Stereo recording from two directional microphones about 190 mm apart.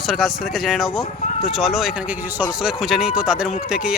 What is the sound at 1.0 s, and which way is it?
Speech, 35° left (ahead or behind).